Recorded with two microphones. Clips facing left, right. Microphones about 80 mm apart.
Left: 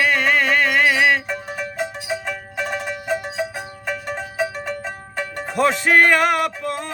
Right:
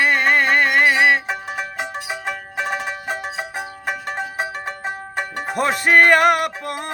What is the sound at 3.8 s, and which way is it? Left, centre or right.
Music, right.